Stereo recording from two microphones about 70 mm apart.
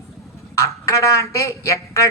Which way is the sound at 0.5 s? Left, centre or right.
Left.